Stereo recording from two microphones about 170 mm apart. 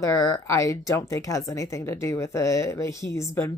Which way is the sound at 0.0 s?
20° left (ahead or behind).